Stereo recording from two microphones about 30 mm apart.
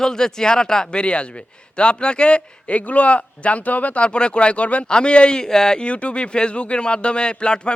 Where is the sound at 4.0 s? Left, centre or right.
Left.